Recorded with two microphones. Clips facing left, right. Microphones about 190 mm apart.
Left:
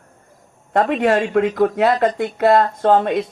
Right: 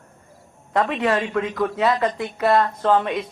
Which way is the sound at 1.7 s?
55° left (ahead or behind).